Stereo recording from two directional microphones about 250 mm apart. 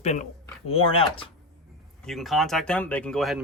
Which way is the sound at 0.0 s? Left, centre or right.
Left.